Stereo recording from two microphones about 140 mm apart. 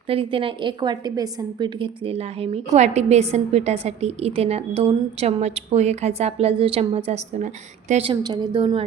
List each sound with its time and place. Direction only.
0.1 s a woman's voice: 40° right (ahead or behind); by 8.0 s 60° right (ahead or behind)
8.0 s a woman's voice: 30° right (ahead or behind)